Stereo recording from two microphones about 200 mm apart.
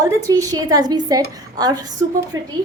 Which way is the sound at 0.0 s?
15° right (ahead or behind).